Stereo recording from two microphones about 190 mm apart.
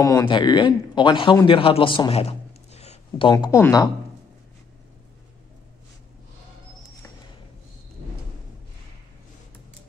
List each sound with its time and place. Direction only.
0.0 s speech: 20° left (ahead or behind)